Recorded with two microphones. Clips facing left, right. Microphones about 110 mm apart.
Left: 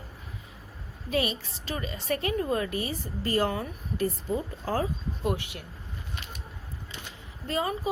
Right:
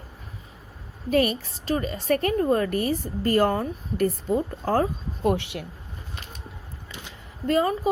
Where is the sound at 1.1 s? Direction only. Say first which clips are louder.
Right 7 dB; 45° right (ahead or behind); by 5.6 s 75° right (ahead or behind).